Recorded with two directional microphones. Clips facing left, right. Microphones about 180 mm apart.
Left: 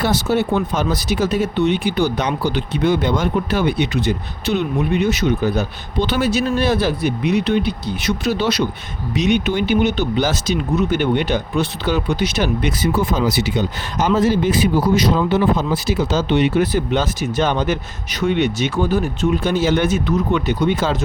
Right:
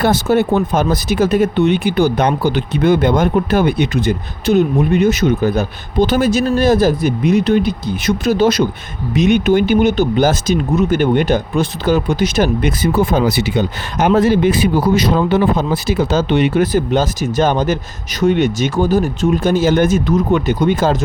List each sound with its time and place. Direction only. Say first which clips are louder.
0.0 s speech: right 4 dB; 55° right (ahead or behind)